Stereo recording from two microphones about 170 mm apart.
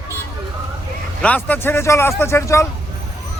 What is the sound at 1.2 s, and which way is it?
Speech, 10° left (ahead or behind).